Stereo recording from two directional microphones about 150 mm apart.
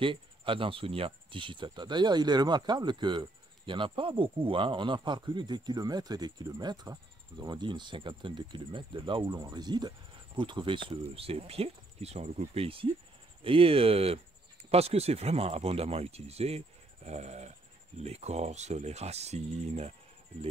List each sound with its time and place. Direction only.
0.0 s speech: 35° right (ahead or behind)